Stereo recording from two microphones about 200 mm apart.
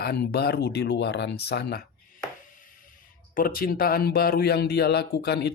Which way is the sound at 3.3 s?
45° left (ahead or behind).